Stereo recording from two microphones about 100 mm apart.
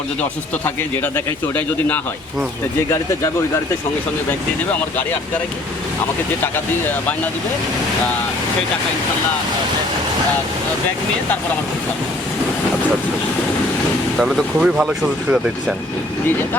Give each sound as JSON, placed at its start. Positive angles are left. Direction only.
{"t": 0.2, "sound": "speech", "side_deg": 20}
{"t": 14.2, "sound": "speech", "side_deg": -5}